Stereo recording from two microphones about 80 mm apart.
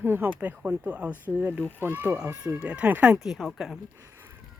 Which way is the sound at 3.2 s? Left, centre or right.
Centre.